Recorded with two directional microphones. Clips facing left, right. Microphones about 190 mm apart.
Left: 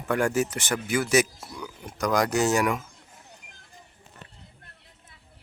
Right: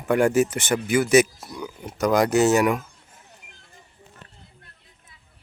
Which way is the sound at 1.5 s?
20° right (ahead or behind).